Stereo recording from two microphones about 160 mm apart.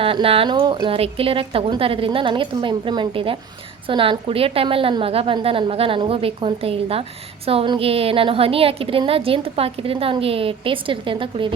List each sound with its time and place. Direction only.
0.0 s a woman's voice: 35° right (ahead or behind)